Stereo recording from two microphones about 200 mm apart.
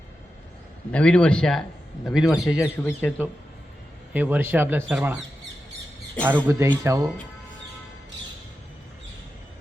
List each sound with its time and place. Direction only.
0.9 s speech: 5° left (ahead or behind)
2.5 s speech: 10° left (ahead or behind)
4.1 s speech: 10° right (ahead or behind)
6.2 s speech: 10° right (ahead or behind)